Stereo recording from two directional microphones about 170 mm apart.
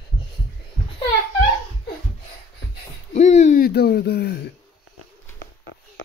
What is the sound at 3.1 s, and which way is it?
Hoot, 40° left (ahead or behind).